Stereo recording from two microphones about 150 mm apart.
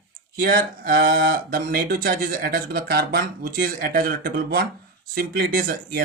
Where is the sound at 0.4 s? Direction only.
75° right (ahead or behind).